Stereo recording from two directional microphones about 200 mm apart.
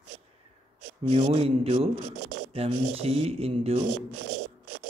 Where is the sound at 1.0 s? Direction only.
35° right (ahead or behind).